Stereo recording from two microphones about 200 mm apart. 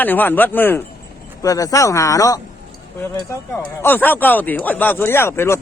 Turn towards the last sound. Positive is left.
turn(degrees=10)  # may be behind; listen again after turning